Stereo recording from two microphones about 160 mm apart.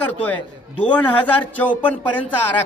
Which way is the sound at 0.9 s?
10° left (ahead or behind).